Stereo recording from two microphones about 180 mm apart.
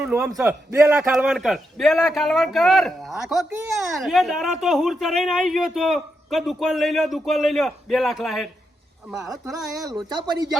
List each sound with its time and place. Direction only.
0.0 s a man's voice: 10° right (ahead or behind)
10.1 s speech: 25° right (ahead or behind)